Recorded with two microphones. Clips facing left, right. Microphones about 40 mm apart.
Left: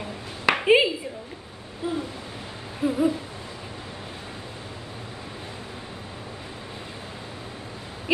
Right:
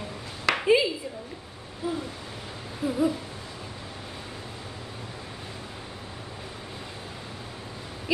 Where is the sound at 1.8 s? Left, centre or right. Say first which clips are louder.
Left 2 dB; left.